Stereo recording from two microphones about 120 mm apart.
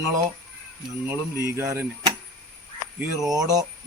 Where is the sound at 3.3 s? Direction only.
35° right (ahead or behind).